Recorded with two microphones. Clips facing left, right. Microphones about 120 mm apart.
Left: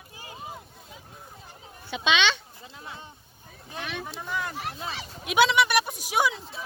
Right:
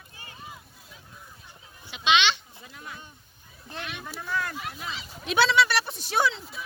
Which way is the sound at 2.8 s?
25° left (ahead or behind).